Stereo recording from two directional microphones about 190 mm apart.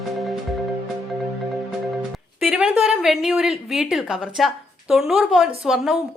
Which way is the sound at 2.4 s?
5° right (ahead or behind).